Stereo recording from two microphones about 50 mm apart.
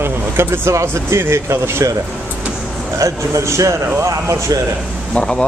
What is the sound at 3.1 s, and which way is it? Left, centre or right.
Speech, right.